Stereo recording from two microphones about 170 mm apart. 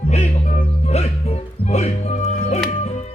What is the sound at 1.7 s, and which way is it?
Music, 40° left (ahead or behind).